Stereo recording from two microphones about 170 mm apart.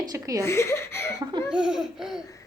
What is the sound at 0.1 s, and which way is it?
Speech, 20° right (ahead or behind).